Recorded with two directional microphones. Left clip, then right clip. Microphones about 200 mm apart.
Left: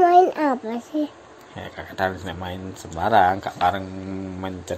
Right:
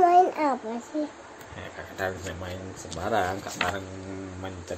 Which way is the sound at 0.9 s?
40° left (ahead or behind).